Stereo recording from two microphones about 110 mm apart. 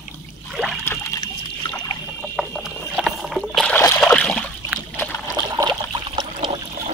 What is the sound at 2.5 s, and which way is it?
Boat, centre (ahead or behind).